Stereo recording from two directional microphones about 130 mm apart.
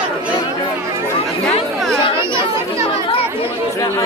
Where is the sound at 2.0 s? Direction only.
40° left (ahead or behind).